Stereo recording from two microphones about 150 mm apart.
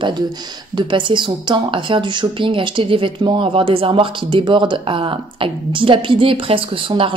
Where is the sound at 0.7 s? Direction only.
30° right (ahead or behind).